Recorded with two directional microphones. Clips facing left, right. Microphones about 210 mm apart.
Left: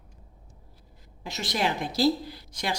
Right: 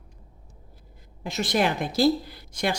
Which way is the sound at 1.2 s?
50° right (ahead or behind).